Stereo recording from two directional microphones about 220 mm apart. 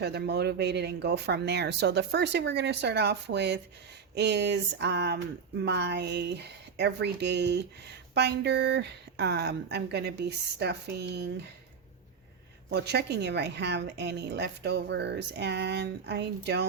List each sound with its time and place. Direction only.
0.0 s a woman's voice: 50° right (ahead or behind)
12.7 s a woman's voice: 50° right (ahead or behind)